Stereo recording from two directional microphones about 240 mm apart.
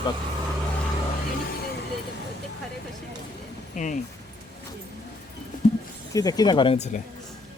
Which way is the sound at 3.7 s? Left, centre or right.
Left.